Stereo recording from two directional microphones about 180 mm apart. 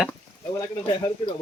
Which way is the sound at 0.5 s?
20° left (ahead or behind).